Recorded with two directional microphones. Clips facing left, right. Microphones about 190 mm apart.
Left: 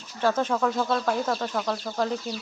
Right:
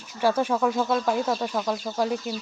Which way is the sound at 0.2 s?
10° right (ahead or behind).